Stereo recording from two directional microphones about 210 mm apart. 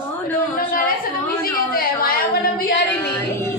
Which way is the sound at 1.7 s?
45° left (ahead or behind).